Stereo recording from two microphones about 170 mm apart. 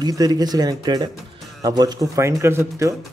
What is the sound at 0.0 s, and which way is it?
Speech, 25° right (ahead or behind).